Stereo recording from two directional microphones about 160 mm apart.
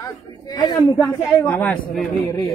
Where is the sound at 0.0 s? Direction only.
20° left (ahead or behind).